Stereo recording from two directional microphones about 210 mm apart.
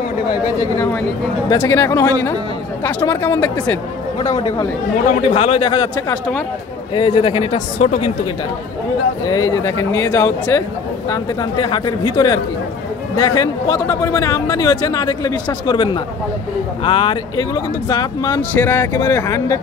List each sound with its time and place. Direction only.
1.5 s speech: 10° left (ahead or behind)
5.3 s a man's voice: 25° left (ahead or behind)
7.8 s a woman's voice: 30° left (ahead or behind)
9.3 s speech: 15° left (ahead or behind)
11.6 s a man's voice: 20° left (ahead or behind)